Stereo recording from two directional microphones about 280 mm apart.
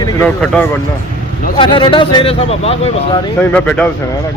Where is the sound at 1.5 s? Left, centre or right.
Centre.